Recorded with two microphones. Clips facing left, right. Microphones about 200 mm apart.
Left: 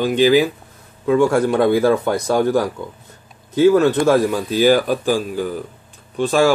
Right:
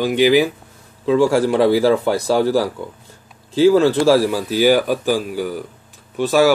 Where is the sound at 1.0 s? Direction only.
25° right (ahead or behind).